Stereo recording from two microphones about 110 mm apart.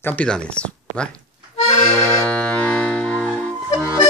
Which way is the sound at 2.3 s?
10° left (ahead or behind).